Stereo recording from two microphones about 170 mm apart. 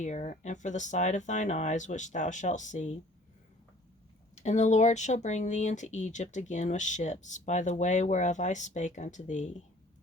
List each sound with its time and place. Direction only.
0.0 s speech: 45° left (ahead or behind)
4.4 s speech: 45° left (ahead or behind)